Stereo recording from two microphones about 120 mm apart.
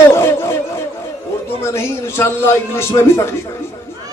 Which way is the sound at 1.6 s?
20° left (ahead or behind).